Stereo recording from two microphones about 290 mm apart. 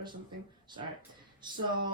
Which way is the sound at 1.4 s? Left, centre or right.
Centre.